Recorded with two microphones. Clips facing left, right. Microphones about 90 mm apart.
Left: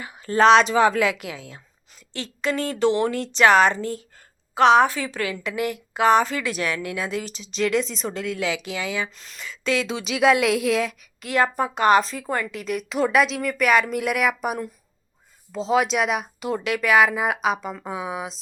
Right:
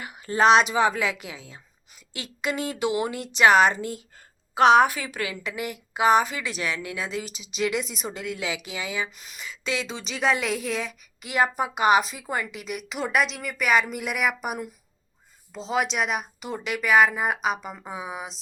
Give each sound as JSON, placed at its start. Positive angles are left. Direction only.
{"t": 0.1, "sound": "a woman's voice", "side_deg": -10}
{"t": 2.4, "sound": "speech", "side_deg": -15}
{"t": 3.8, "sound": "a woman's voice", "side_deg": 35}
{"t": 4.5, "sound": "speech", "side_deg": -15}
{"t": 5.4, "sound": "a woman's voice", "side_deg": -5}